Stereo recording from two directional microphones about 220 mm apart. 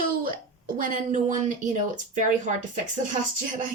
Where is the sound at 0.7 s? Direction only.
35° right (ahead or behind).